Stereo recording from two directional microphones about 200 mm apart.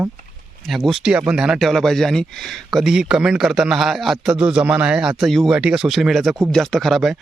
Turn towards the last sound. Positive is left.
turn(degrees=0)  # may be behind; listen again after turning